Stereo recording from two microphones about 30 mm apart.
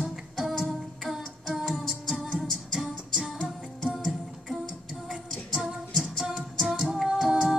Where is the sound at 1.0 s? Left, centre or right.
Centre.